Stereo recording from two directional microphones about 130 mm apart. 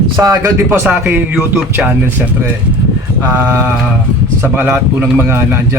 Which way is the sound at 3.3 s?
15° right (ahead or behind).